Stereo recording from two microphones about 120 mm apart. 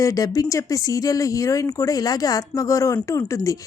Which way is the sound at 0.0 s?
30° left (ahead or behind).